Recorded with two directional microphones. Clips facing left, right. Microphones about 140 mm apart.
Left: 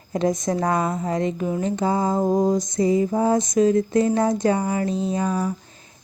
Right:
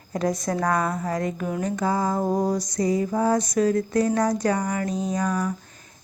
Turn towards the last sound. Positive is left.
turn(degrees=30)  # may be behind; listen again after turning